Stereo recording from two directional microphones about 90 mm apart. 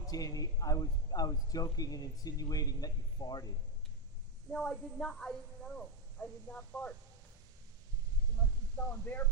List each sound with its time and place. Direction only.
0.1 s speech: 45° left (ahead or behind)
4.5 s a woman's voice: 5° left (ahead or behind)
8.7 s speech: 20° left (ahead or behind)